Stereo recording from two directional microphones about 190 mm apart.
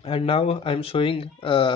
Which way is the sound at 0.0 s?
30° left (ahead or behind).